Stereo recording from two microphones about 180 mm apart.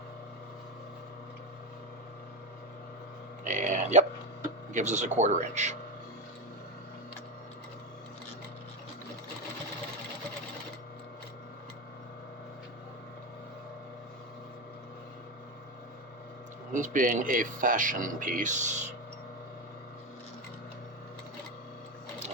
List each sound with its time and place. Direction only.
3.4 s speech: 45° right (ahead or behind)
16.7 s speech: 45° right (ahead or behind)